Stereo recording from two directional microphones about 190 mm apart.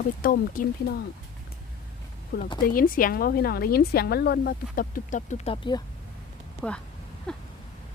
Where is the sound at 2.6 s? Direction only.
50° left (ahead or behind).